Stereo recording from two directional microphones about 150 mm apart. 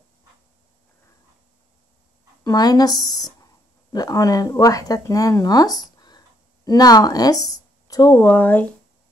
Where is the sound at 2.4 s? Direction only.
25° left (ahead or behind).